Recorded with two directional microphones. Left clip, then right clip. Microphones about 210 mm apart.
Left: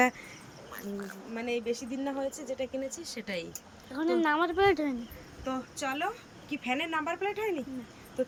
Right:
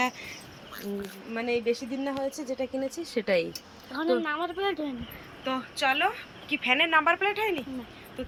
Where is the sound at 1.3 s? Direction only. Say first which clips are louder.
Right 5 dB; 15° right (ahead or behind).